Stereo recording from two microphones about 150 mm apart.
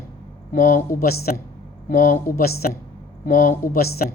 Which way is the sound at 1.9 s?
65° left (ahead or behind).